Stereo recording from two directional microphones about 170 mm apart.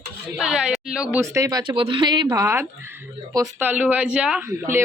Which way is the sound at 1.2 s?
15° right (ahead or behind).